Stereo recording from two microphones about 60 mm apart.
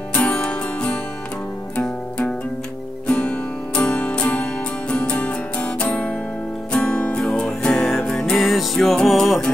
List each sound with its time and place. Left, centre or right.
0.1 s music: left
8.4 s music: centre